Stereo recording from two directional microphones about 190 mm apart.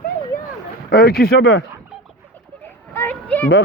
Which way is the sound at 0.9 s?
55° left (ahead or behind).